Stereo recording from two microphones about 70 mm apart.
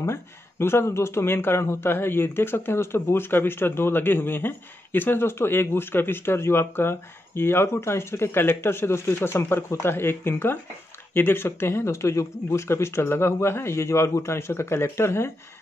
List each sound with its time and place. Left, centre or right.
0.0 s speech: left